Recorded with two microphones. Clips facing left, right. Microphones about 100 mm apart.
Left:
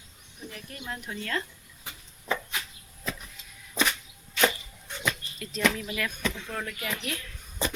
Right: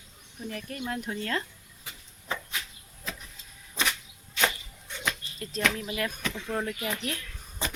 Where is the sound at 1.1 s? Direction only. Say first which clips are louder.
Left 1 dB; 30° right (ahead or behind).